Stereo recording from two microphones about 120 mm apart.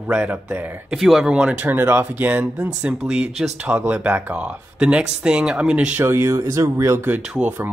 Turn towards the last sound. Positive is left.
turn(degrees=-10)  # may be behind; listen again after turning